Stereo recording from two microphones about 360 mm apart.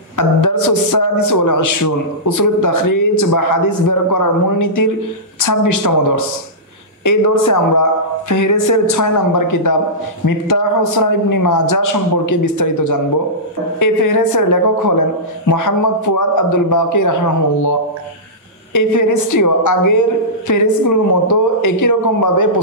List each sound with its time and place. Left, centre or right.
0.4 s a man's voice: left